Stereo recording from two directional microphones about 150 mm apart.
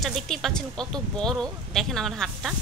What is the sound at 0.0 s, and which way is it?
Speech, centre (ahead or behind).